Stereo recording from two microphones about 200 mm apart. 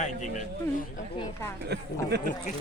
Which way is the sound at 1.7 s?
55° right (ahead or behind).